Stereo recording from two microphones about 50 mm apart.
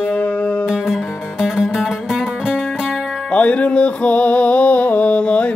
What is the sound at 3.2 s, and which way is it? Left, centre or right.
Music, left.